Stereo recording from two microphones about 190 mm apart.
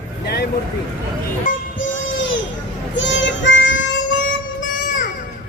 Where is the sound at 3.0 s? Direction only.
70° left (ahead or behind).